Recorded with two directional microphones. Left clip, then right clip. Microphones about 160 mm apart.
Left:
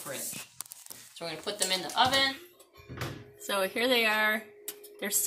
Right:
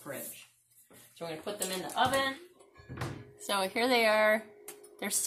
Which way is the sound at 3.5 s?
10° right (ahead or behind).